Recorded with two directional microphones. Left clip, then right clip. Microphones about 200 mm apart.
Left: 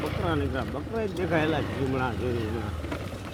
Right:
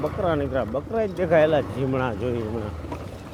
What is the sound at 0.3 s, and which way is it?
Speech, 50° right (ahead or behind).